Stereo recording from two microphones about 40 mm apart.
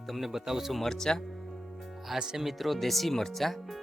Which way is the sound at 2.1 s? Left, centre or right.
Centre.